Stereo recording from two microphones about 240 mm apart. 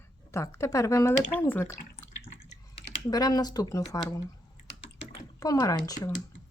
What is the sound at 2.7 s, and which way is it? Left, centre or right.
Speech, centre.